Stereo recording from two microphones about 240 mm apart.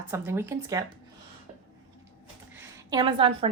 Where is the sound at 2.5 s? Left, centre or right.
Centre.